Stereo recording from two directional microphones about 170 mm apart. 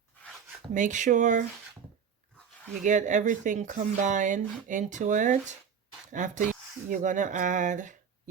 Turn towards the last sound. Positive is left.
turn(degrees=-45)  # may be behind; listen again after turning